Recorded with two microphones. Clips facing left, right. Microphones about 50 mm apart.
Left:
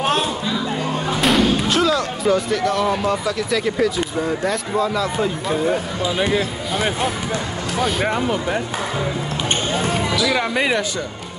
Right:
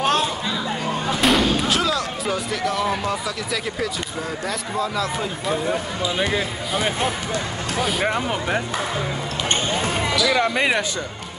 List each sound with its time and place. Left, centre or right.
1.2 s speech: centre
7.8 s speech: centre
8.3 s speech: centre
10.3 s speech: centre